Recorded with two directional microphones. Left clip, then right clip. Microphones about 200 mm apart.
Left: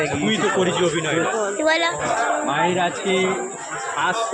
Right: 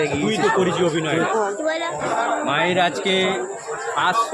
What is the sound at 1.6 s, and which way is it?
Speech, 15° left (ahead or behind).